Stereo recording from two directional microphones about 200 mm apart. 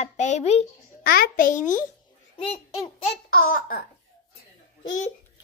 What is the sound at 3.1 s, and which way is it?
Speech, 45° left (ahead or behind).